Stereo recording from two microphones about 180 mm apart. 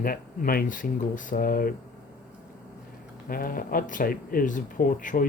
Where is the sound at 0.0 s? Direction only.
55° left (ahead or behind).